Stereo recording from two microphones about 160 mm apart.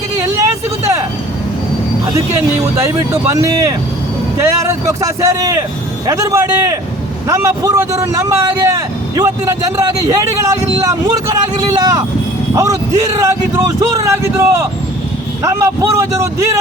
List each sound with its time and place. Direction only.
2.7 s a man's voice: 20° right (ahead or behind)